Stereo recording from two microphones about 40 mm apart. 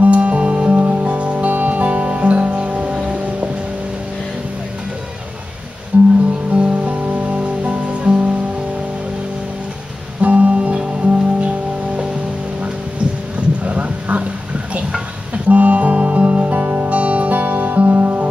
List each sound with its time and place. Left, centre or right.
0.0 s music: right
5.9 s music: right
6.5 s music: right
10.2 s music: right
13.7 s a sound: right
15.3 s music: right